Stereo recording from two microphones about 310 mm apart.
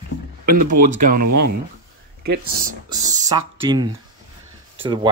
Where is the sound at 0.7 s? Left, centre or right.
Right.